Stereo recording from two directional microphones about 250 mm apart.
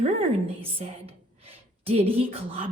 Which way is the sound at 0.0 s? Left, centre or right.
Right.